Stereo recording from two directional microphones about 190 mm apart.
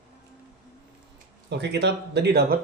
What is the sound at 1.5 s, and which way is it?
Speech, 65° right (ahead or behind).